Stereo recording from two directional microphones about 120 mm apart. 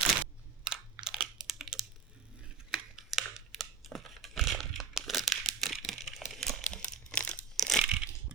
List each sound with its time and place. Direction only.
1.0 s a sound: 5° right (ahead or behind)
6.7 s crumpling: 10° left (ahead or behind)
7.5 s crushing: 5° left (ahead or behind)
7.9 s crushing: 10° right (ahead or behind)